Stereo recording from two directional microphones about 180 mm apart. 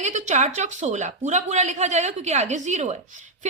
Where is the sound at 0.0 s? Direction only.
40° right (ahead or behind).